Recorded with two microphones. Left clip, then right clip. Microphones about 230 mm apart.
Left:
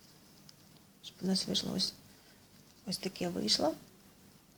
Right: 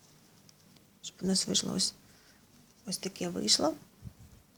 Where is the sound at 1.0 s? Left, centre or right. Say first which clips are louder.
Right 3 dB; centre.